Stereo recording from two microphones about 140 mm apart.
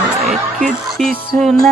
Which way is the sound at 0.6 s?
Centre (ahead or behind).